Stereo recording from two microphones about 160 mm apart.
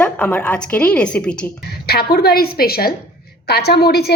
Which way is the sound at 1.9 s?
75° left (ahead or behind).